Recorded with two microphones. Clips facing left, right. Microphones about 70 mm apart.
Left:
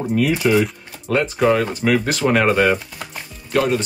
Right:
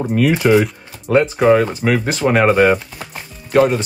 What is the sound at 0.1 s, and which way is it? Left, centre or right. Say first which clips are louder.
Speech: right 3 dB; right.